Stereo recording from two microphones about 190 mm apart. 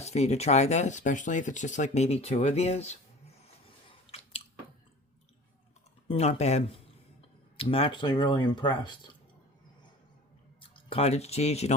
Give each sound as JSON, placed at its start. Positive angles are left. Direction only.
{"t": 0.0, "sound": "speech", "side_deg": 35}
{"t": 6.1, "sound": "speech", "side_deg": 35}
{"t": 10.6, "sound": "speech", "side_deg": 25}